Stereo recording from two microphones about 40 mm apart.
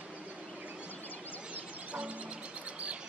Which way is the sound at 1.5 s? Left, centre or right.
Right.